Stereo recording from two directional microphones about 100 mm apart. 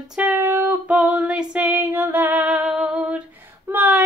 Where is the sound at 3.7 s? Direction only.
15° right (ahead or behind).